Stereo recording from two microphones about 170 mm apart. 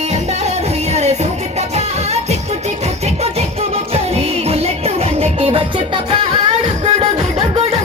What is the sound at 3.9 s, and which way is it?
Music, 35° right (ahead or behind).